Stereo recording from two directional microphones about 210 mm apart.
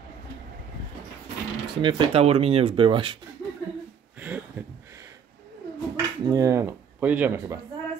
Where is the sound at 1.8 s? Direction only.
25° right (ahead or behind).